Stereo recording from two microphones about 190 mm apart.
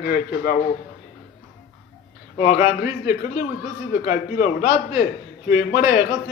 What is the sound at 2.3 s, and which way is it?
Speech, 40° left (ahead or behind).